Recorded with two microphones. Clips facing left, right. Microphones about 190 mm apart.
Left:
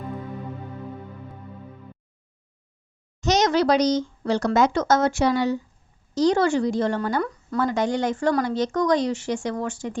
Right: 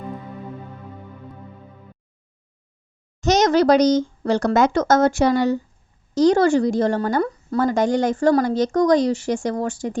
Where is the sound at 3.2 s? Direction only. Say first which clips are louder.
Right 4 dB; 45° right (ahead or behind).